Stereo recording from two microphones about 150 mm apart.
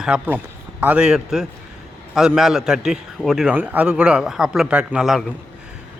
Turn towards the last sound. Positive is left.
turn(degrees=-5)  # may be behind; listen again after turning